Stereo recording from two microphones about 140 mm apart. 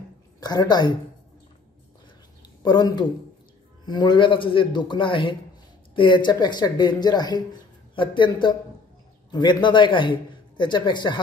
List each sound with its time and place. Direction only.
0.4 s a woman's voice: 30° left (ahead or behind)
2.4 s a man's voice: 30° left (ahead or behind)